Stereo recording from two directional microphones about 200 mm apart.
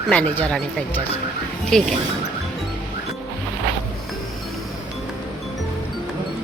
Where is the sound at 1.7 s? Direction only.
5° left (ahead or behind).